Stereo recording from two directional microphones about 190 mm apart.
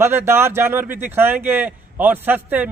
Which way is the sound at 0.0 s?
10° right (ahead or behind).